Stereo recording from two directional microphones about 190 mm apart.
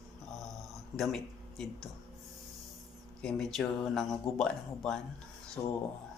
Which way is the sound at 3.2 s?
Centre (ahead or behind).